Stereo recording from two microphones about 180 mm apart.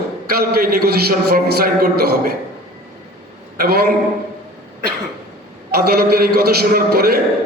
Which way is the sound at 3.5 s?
60° right (ahead or behind).